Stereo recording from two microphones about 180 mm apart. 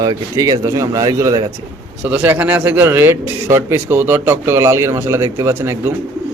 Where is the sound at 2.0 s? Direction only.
10° right (ahead or behind).